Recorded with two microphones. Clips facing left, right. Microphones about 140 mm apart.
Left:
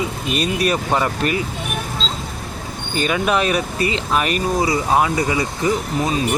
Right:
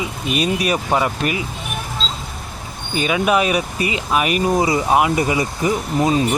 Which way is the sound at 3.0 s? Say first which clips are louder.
Right 2 dB; 5° right (ahead or behind).